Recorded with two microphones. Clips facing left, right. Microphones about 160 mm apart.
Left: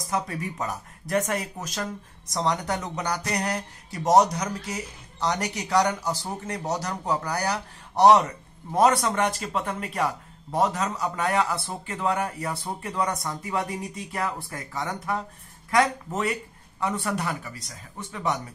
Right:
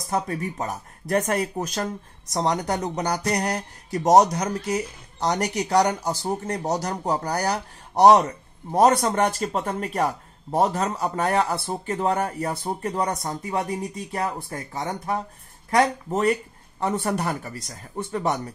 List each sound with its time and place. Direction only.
0.1 s speech: 45° right (ahead or behind)
14.7 s speech: 25° right (ahead or behind); by 18.4 s 45° right (ahead or behind)